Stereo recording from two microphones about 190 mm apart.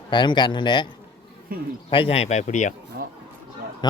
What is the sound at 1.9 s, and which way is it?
Speech, 30° left (ahead or behind).